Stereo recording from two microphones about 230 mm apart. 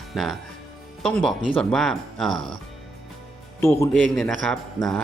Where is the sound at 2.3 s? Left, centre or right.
Right.